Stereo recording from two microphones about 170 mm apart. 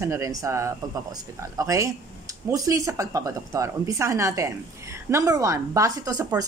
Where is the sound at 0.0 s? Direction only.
20° right (ahead or behind).